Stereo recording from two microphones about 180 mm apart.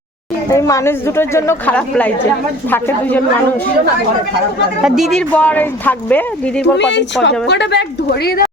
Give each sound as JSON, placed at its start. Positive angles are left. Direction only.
{"t": 0.5, "sound": "speech", "side_deg": 15}
{"t": 4.8, "sound": "speech", "side_deg": -5}
{"t": 6.7, "sound": "a woman's voice", "side_deg": 80}